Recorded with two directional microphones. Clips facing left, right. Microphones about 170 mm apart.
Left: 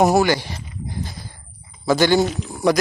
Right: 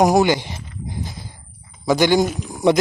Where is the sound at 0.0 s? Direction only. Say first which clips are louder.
Right 1 dB; 15° right (ahead or behind).